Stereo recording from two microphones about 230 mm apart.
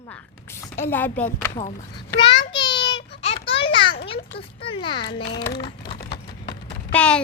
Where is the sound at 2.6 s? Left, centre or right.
Centre.